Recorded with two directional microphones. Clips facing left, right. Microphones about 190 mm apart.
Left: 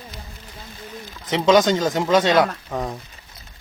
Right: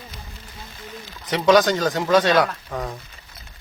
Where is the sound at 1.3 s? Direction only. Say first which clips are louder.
Even; 20° left (ahead or behind).